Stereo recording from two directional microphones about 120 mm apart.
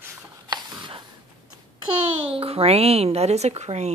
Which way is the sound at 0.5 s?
45° right (ahead or behind).